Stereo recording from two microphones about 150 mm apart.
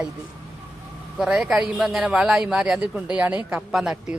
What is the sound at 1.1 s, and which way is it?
A man's voice, 5° right (ahead or behind).